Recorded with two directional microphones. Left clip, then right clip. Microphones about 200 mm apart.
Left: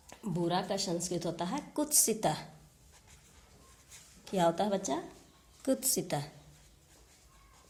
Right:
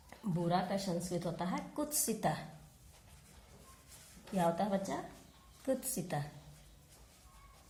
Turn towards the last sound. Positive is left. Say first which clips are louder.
# left 5 dB
turn(degrees=45)  # may be behind; listen again after turning